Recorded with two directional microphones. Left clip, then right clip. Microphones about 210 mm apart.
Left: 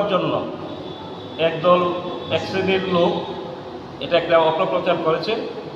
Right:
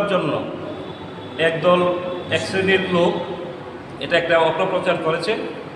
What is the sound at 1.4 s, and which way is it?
A man's voice, 20° right (ahead or behind).